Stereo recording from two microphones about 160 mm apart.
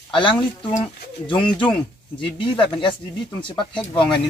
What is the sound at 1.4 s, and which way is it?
Speech, 5° left (ahead or behind).